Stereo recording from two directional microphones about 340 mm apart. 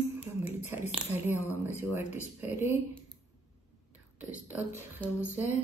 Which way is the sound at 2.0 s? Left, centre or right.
Left.